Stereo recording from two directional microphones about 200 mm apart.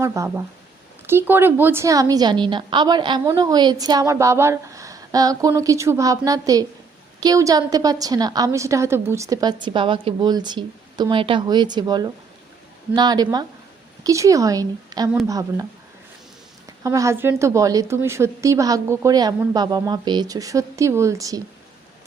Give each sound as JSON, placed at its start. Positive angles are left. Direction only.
{"t": 0.0, "sound": "a woman's voice", "side_deg": -15}
{"t": 16.8, "sound": "a woman's voice", "side_deg": -15}